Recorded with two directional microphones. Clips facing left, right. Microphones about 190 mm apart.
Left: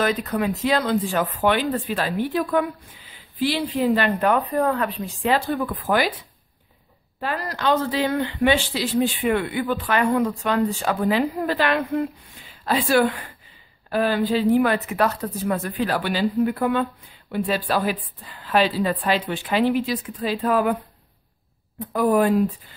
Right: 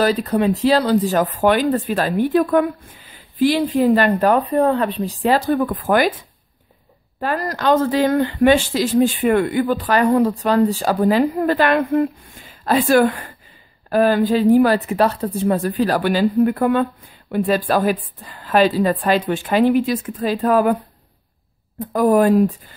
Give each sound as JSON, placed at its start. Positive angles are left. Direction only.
{"t": 0.0, "sound": "speech", "side_deg": -35}
{"t": 7.2, "sound": "speech", "side_deg": -45}
{"t": 21.7, "sound": "speech", "side_deg": -45}